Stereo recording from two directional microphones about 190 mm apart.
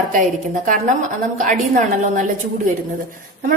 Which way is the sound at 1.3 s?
40° right (ahead or behind).